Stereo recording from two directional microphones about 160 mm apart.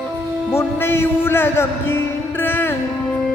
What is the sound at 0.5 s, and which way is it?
Music, 15° left (ahead or behind).